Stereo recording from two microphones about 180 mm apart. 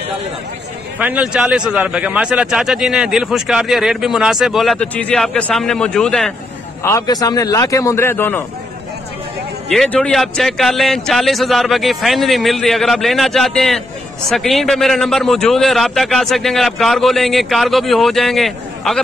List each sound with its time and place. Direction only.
0.9 s a man's voice: 5° right (ahead or behind)
6.8 s a man's voice: 15° left (ahead or behind)
9.7 s a man's voice: 5° left (ahead or behind)